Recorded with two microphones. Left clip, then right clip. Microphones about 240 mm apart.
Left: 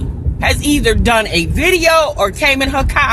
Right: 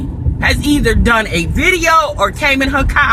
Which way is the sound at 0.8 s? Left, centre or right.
Centre.